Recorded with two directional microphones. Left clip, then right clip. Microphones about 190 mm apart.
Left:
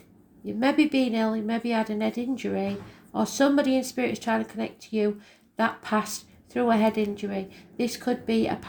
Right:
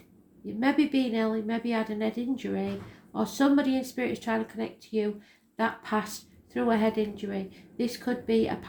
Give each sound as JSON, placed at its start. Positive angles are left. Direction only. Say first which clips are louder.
{"t": 0.4, "sound": "a woman's voice", "louder": "left 3 dB", "side_deg": 40}